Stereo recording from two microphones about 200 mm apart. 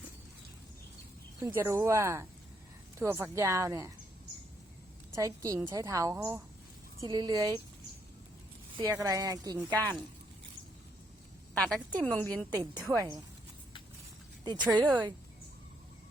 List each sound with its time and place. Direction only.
1.4 s a woman's voice: 10° right (ahead or behind)
5.1 s a woman's voice: 15° right (ahead or behind)
8.7 s a woman's voice: 15° right (ahead or behind)
11.5 s a woman's voice: 5° left (ahead or behind)
12.5 s a woman's voice: 20° right (ahead or behind)
14.6 s a woman's voice: 5° right (ahead or behind)